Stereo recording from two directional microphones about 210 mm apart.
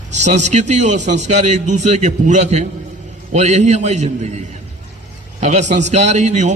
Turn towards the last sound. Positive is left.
turn(degrees=-35)  # may be behind; listen again after turning